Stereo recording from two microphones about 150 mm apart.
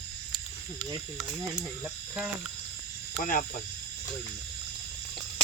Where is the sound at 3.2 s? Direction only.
60° left (ahead or behind).